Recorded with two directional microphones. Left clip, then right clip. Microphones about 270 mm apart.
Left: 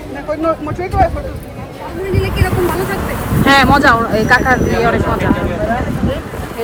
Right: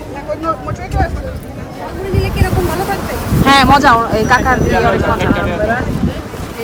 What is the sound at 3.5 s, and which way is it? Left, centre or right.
Speech, centre.